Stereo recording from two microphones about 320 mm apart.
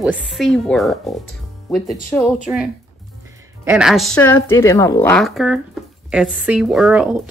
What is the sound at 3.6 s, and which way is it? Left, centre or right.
A woman's voice, centre.